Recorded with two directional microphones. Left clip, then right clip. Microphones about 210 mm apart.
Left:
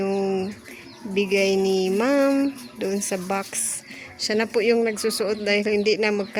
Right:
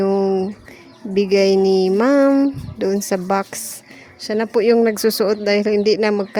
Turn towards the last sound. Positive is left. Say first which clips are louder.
# right 5 dB
turn(degrees=-25)  # may be behind; listen again after turning